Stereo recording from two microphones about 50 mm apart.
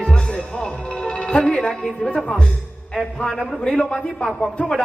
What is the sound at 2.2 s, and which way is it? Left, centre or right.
Speech, left.